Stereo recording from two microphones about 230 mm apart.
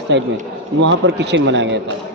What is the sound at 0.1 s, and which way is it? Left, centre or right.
A man's voice, right.